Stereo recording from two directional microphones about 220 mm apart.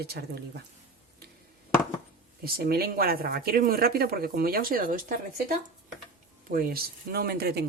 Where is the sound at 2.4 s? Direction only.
45° right (ahead or behind).